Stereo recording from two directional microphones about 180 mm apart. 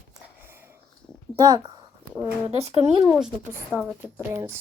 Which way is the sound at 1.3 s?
20° right (ahead or behind).